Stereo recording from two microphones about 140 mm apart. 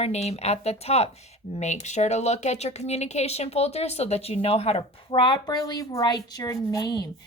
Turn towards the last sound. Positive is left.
turn(degrees=30)  # may be behind; listen again after turning